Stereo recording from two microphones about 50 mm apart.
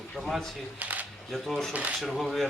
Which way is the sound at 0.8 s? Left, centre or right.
Right.